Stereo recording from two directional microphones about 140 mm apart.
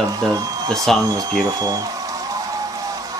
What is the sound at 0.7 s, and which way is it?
Speech, 5° left (ahead or behind).